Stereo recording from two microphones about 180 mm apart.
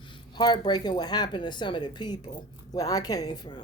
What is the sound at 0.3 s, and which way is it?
Speech, 25° left (ahead or behind).